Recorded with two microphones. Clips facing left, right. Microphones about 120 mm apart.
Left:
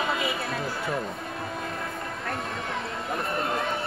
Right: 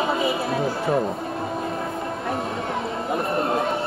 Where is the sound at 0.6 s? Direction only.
25° right (ahead or behind).